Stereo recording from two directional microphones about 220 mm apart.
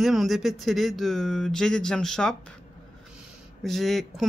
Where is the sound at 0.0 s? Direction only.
Centre (ahead or behind).